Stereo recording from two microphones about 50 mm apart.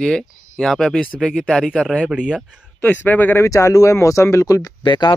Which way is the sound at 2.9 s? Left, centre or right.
Left.